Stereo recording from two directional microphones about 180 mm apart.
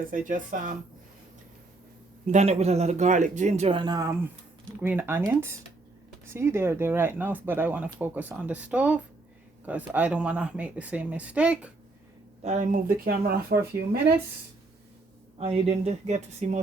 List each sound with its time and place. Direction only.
0.0 s speech: 50° right (ahead or behind)
2.2 s a man's voice: 40° right (ahead or behind); by 11.7 s 5° right (ahead or behind)
12.4 s speech: 40° right (ahead or behind); by 13.6 s 60° right (ahead or behind)
15.4 s a man's voice: 35° right (ahead or behind)